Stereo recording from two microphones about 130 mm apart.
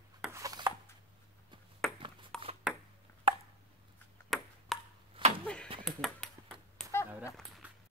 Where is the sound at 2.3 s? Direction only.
5° left (ahead or behind).